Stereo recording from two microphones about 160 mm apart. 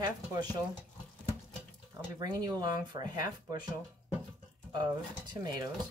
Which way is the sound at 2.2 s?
25° right (ahead or behind).